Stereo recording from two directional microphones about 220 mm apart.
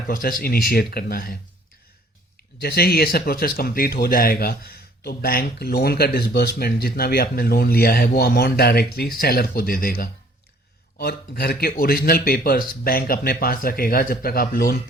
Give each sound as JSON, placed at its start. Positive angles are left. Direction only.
{"t": 0.1, "sound": "speech", "side_deg": 40}
{"t": 2.6, "sound": "speech", "side_deg": 45}